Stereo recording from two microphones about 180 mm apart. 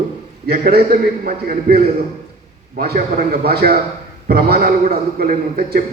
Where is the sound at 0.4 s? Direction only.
60° right (ahead or behind).